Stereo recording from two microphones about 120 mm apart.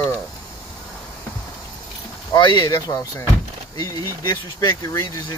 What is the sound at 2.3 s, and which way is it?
Speech, 35° left (ahead or behind).